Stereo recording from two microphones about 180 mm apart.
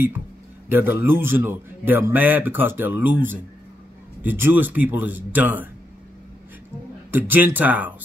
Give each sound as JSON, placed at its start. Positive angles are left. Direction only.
{"t": 0.7, "sound": "speech", "side_deg": -10}
{"t": 7.1, "sound": "speech", "side_deg": -10}